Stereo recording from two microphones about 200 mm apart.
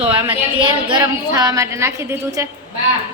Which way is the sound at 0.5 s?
25° right (ahead or behind).